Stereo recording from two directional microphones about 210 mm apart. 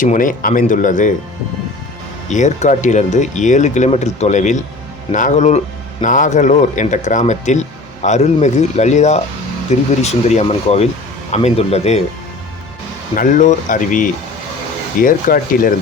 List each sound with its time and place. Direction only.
0.0 s a man's voice: 40° left (ahead or behind)
2.3 s a man's voice: 35° left (ahead or behind)
13.1 s a man's voice: 35° left (ahead or behind)